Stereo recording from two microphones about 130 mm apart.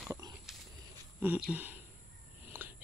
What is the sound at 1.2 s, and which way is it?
Speech, 10° right (ahead or behind).